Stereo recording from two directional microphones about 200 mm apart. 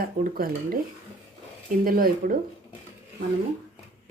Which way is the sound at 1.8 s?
45° right (ahead or behind).